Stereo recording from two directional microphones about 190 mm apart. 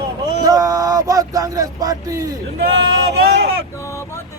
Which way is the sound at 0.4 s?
20° right (ahead or behind).